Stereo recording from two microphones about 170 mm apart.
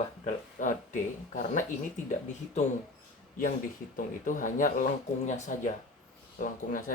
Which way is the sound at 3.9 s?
50° left (ahead or behind).